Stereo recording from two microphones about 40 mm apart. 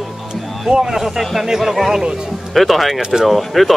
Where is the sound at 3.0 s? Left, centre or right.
Centre.